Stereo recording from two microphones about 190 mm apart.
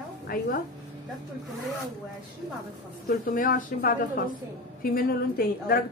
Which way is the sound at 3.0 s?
45° left (ahead or behind).